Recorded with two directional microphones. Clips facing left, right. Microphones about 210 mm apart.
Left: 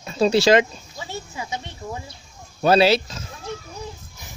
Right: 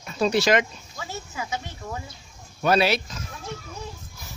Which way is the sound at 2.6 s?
30° left (ahead or behind).